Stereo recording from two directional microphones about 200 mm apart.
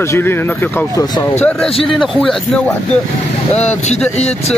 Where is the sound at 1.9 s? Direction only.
Centre (ahead or behind).